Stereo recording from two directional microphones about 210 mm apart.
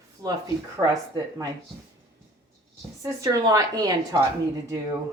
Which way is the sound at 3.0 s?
15° right (ahead or behind).